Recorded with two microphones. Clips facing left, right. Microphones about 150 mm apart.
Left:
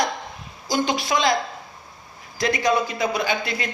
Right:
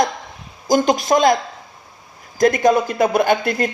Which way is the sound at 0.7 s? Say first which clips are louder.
Right 7 dB; 45° right (ahead or behind).